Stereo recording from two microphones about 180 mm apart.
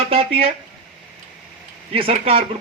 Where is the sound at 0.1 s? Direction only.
35° right (ahead or behind).